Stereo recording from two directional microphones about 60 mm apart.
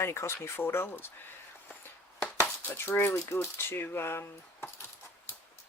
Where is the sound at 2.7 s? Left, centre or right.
Left.